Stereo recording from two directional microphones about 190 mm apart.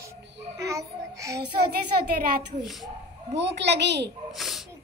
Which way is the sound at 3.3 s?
65° right (ahead or behind).